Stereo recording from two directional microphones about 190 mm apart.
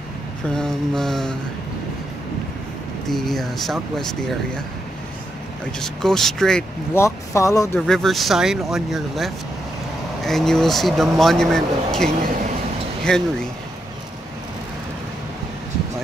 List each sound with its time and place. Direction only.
0.6 s speech: centre (ahead or behind)
3.1 s speech: centre (ahead or behind)
5.8 s speech: centre (ahead or behind)
7.0 s speech: 15° left (ahead or behind)
7.8 s speech: centre (ahead or behind)